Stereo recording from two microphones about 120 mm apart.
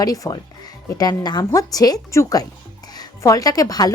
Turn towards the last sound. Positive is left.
turn(degrees=30)  # may be behind; listen again after turning